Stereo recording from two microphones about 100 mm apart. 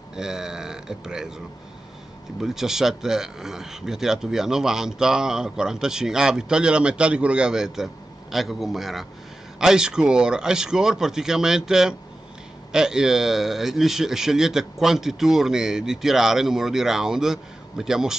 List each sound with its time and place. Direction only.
0.1 s speech: 5° right (ahead or behind)
2.4 s speech: 5° right (ahead or behind)